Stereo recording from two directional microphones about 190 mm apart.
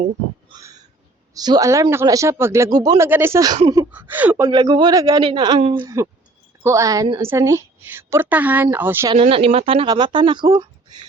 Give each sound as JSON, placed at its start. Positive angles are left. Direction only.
{"t": 0.5, "sound": "a sound", "side_deg": -20}
{"t": 1.3, "sound": "a woman's voice", "side_deg": -20}
{"t": 5.8, "sound": "a woman's voice", "side_deg": -15}
{"t": 9.1, "sound": "speech", "side_deg": -30}